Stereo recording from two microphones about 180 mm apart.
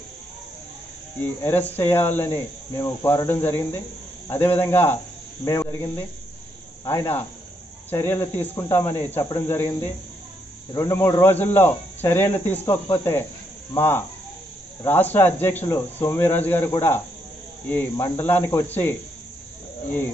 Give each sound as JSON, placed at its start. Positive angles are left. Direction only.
{"t": 1.4, "sound": "speech", "side_deg": 10}